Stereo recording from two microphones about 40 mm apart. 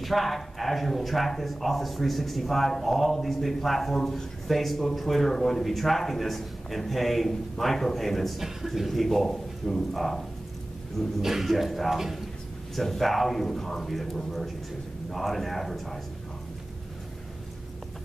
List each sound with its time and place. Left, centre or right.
0.0 s speech: centre
11.1 s speech: centre
15.0 s speech: centre